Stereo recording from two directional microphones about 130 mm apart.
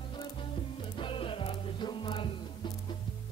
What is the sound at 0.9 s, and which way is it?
Music, 40° left (ahead or behind).